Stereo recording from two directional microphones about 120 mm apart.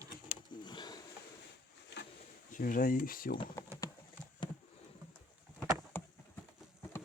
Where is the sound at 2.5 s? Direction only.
90° left.